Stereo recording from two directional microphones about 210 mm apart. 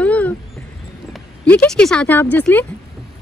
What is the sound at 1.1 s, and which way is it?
Speech, 5° left (ahead or behind).